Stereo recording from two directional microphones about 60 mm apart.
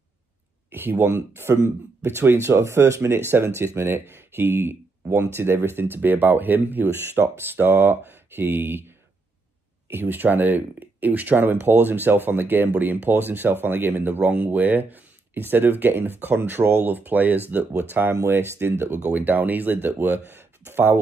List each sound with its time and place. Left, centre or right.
0.7 s speech: right
18.8 s speech: right